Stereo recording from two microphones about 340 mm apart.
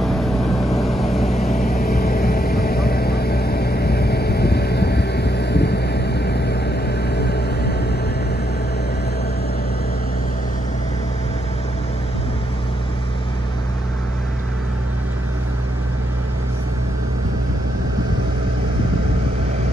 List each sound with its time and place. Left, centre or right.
0.7 s vehicle: centre
1.6 s vehicle: left